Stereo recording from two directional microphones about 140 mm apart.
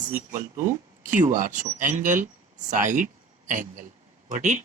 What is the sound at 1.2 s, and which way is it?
Speech, 65° right (ahead or behind).